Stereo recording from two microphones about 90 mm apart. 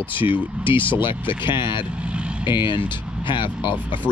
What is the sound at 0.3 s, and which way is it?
Speech, 70° left (ahead or behind).